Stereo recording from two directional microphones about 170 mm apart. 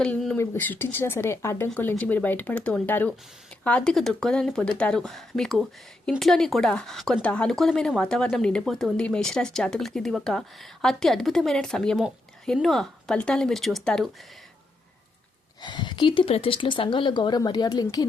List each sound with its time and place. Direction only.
0.0 s speech: 5° left (ahead or behind)
15.6 s speech: 25° left (ahead or behind)